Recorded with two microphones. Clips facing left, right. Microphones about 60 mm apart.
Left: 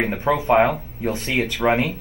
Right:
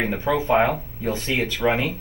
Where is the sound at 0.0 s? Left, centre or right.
Left.